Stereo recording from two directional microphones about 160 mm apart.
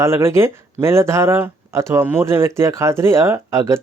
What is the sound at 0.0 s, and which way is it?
Speech, 15° right (ahead or behind).